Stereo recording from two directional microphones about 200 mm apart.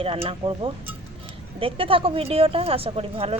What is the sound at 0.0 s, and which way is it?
A woman's voice, 30° right (ahead or behind).